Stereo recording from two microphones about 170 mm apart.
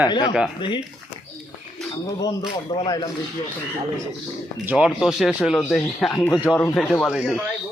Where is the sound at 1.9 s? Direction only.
25° left (ahead or behind).